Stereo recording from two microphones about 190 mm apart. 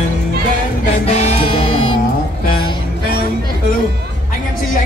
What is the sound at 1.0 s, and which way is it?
Music, 35° left (ahead or behind).